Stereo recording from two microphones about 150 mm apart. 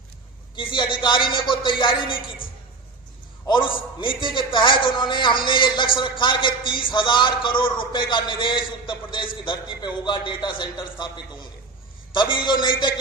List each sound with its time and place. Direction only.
0.5 s a man's voice: 35° left (ahead or behind)
3.4 s a man's voice: 35° left (ahead or behind)
12.1 s a man's voice: 30° left (ahead or behind)